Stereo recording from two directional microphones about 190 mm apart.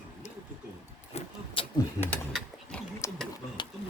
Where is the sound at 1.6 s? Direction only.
30° left (ahead or behind).